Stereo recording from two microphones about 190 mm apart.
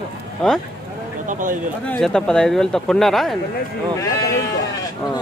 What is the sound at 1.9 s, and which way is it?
Speech, 5° left (ahead or behind).